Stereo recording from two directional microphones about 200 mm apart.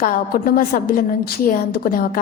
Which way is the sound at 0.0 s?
45° left (ahead or behind).